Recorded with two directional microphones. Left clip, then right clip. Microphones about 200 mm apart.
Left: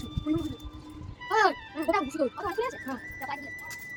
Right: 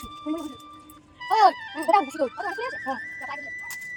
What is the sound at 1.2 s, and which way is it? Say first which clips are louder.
Music: right 6 dB; 35° right (ahead or behind).